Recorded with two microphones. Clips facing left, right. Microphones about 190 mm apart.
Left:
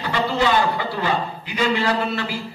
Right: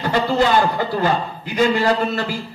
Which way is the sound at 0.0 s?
45° right (ahead or behind).